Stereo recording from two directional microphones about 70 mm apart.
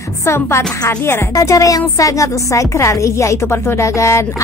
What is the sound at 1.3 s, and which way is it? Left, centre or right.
Speech, left.